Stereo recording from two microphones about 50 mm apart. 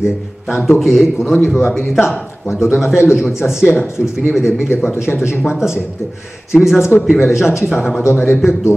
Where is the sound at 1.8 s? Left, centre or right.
Left.